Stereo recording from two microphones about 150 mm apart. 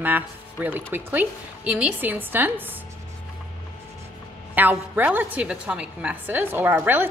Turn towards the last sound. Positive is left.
turn(degrees=-15)  # may be behind; listen again after turning